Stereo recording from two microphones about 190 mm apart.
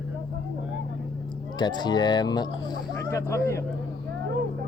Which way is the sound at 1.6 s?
20° left (ahead or behind).